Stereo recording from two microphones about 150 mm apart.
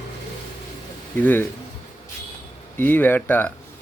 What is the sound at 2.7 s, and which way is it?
Speech, 15° left (ahead or behind).